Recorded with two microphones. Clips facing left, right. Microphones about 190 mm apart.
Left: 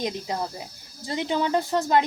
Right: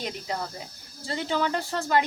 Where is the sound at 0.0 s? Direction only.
20° left (ahead or behind).